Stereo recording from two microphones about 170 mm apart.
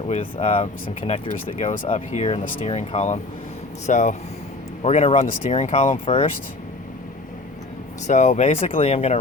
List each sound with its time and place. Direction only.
0.1 s speech: 35° left (ahead or behind)
8.0 s speech: 45° left (ahead or behind)